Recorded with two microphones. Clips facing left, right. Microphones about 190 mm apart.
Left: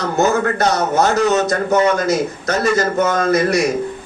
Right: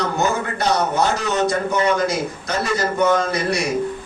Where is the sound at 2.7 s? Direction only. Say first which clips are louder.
Right 3 dB; 45° left (ahead or behind).